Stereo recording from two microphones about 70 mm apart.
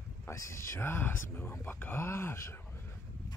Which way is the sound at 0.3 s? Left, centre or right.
Left.